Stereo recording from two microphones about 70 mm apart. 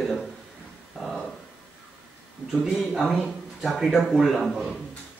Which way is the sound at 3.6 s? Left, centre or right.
Centre.